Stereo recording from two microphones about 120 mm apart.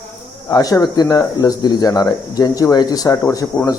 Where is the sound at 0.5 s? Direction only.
30° left (ahead or behind).